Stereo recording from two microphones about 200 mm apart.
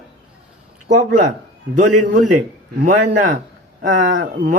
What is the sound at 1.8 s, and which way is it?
Speech, 40° right (ahead or behind).